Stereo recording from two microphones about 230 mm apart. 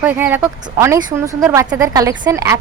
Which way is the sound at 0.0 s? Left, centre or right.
Centre.